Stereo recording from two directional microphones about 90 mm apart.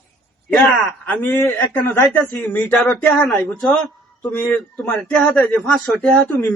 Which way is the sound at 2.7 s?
Centre (ahead or behind).